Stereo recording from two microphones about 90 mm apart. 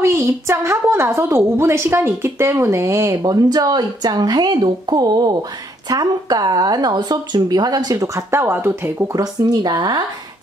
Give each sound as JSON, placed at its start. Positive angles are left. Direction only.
{"t": 0.0, "sound": "a woman's voice", "side_deg": -30}
{"t": 9.2, "sound": "speech", "side_deg": -50}